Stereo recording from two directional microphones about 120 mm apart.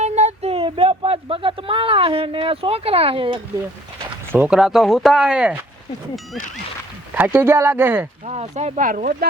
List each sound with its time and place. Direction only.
0.0 s a sound: 65° right (ahead or behind); by 3.4 s 45° right (ahead or behind)
4.3 s speech: 10° right (ahead or behind)
7.1 s speech: 15° right (ahead or behind)
8.3 s speech: 70° right (ahead or behind)